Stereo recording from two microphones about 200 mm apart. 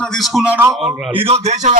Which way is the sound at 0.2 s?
5° right (ahead or behind).